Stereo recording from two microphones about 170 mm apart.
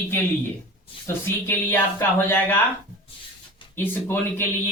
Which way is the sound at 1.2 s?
10° left (ahead or behind).